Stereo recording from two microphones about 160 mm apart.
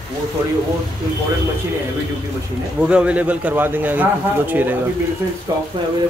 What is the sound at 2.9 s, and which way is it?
Speech, 10° right (ahead or behind).